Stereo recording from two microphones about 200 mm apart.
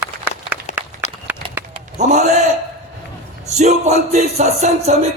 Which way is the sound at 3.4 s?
35° right (ahead or behind).